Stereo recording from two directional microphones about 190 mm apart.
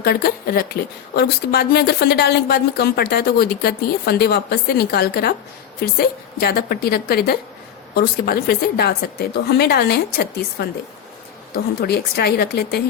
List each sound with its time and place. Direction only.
0.0 s a woman's voice: 55° left (ahead or behind)
11.8 s a woman's voice: 55° left (ahead or behind)